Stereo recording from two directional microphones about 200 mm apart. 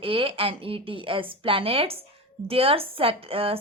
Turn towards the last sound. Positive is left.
turn(degrees=-30)  # may be behind; listen again after turning